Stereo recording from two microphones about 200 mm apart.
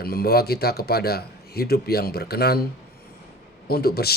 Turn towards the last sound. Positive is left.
turn(degrees=50)  # may be behind; listen again after turning